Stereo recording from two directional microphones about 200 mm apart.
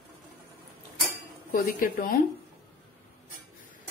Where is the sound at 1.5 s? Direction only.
45° left (ahead or behind).